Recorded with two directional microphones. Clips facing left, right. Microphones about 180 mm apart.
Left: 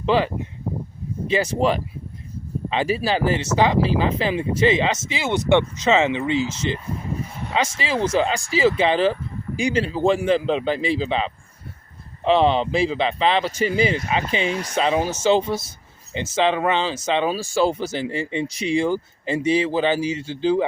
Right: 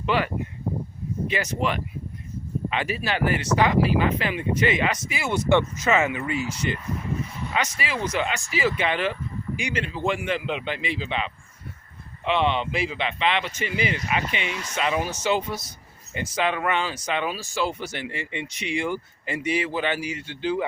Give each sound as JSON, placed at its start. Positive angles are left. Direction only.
{"t": 0.0, "sound": "speech", "side_deg": 30}
{"t": 1.3, "sound": "speech", "side_deg": 30}